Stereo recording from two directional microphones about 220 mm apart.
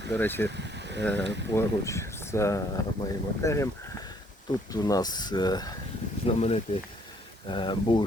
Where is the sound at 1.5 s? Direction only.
15° left (ahead or behind).